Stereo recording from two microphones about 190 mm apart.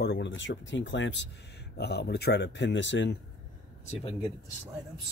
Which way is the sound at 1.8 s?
60° left (ahead or behind).